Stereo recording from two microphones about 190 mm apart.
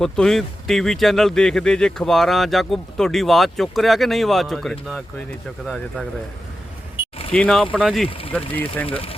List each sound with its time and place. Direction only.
0.0 s speech: 5° left (ahead or behind)
6.9 s a sound: 30° left (ahead or behind)
7.3 s speech: 5° left (ahead or behind)
8.9 s speech: 30° left (ahead or behind)